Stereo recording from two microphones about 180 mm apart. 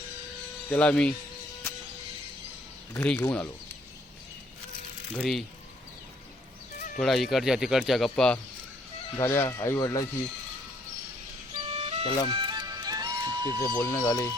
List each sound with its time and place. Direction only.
0.7 s speech: 5° left (ahead or behind)
2.9 s speech: 10° left (ahead or behind)
5.1 s speech: 5° left (ahead or behind)
6.7 s chicken: 50° left (ahead or behind)
7.0 s speech: centre (ahead or behind)
9.1 s speech: 15° left (ahead or behind)
11.7 s music: 35° right (ahead or behind)
12.0 s speech: 25° left (ahead or behind)
12.3 s music: 25° right (ahead or behind)
13.7 s speech: 15° left (ahead or behind)